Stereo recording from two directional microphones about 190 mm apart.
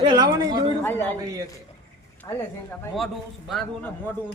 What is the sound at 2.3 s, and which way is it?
Speech, 20° left (ahead or behind).